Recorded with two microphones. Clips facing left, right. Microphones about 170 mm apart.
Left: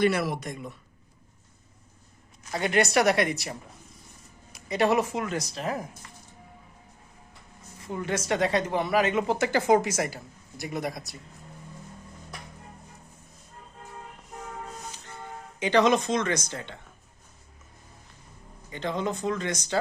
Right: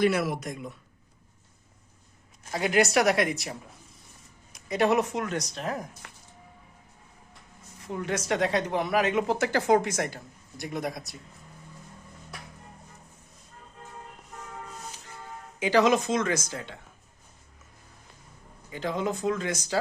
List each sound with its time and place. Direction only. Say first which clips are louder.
0.0 s speech: even; centre (ahead or behind)
2.5 s speech: right 1 dB; centre (ahead or behind)
7.8 s speech: left 1 dB; centre (ahead or behind)
15.5 s speech: even; 5° right (ahead or behind)
18.7 s speech: even; 5° right (ahead or behind)